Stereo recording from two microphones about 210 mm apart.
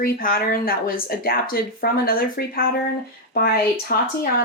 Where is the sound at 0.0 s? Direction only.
45° left (ahead or behind).